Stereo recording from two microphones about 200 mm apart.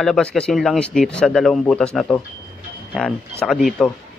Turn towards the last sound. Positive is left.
turn(degrees=0)  # may be behind; listen again after turning